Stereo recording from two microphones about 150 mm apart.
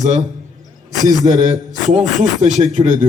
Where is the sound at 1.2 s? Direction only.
55° right (ahead or behind).